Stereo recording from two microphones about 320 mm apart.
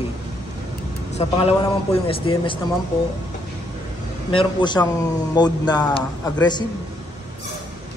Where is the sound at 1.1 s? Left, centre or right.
Centre.